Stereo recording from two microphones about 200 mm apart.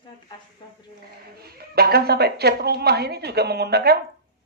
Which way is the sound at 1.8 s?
50° right (ahead or behind).